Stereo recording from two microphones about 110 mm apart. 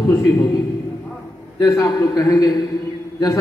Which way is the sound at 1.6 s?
30° left (ahead or behind).